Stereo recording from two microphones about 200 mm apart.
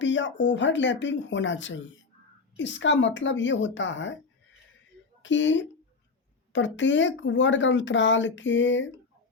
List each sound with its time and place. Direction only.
0.0 s speech: 65° left (ahead or behind)
5.2 s speech: 65° left (ahead or behind)